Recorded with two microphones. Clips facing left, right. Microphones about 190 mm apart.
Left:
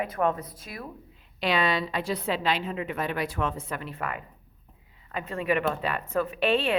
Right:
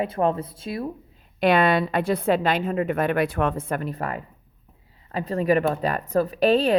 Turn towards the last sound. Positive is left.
turn(degrees=-40)  # may be behind; listen again after turning